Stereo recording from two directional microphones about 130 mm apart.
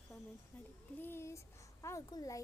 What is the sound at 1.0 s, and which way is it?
A child's voice, 20° left (ahead or behind).